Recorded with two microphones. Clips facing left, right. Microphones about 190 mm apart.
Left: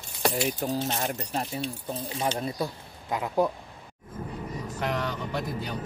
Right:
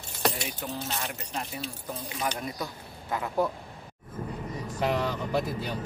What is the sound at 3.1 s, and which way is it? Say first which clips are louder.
Speech: left 2 dB; 15° left (ahead or behind).